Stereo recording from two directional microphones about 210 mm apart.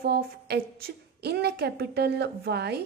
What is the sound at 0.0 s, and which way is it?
A woman's voice, 50° right (ahead or behind).